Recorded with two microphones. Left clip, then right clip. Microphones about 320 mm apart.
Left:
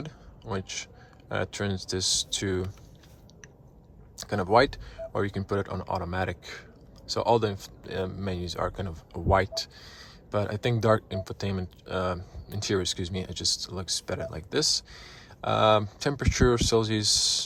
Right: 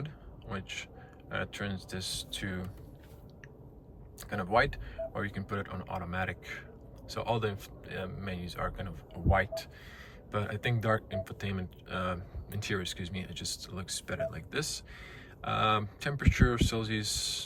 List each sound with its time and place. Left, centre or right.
0.0 s a sound: centre
1.3 s speech: centre
4.2 s speech: centre